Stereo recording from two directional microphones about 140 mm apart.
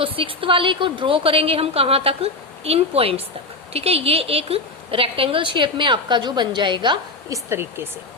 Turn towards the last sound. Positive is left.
turn(degrees=-15)  # may be behind; listen again after turning